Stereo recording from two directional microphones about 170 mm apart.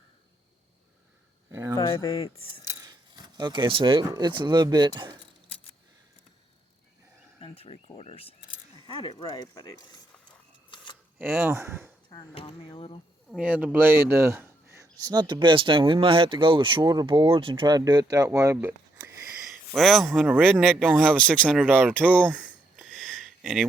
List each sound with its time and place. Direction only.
1.5 s speech: 15° right (ahead or behind)
1.7 s speech: 20° left (ahead or behind)
2.6 s keys jangling: 20° right (ahead or behind)
4.1 s speech: 25° right (ahead or behind)
7.4 s speech: 35° left (ahead or behind)
11.2 s speech: 15° right (ahead or behind)
12.0 s speech: 35° left (ahead or behind)
13.3 s speech: 10° right (ahead or behind)
19.5 s a man's voice: centre (ahead or behind)
21.6 s speech: 10° right (ahead or behind)
22.7 s a sound: centre (ahead or behind)